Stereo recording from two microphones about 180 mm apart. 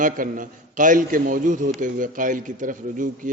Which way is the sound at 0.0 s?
45° right (ahead or behind).